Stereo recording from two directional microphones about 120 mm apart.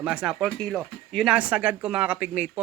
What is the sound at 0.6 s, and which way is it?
Speech, 5° left (ahead or behind).